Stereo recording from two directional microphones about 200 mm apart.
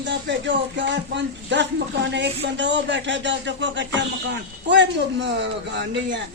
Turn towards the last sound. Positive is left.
turn(degrees=-60)  # may be behind; listen again after turning